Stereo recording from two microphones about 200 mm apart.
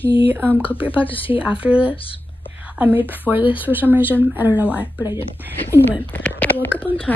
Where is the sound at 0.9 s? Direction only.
25° left (ahead or behind).